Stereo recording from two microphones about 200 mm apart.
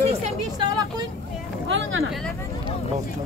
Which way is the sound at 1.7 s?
70° right (ahead or behind).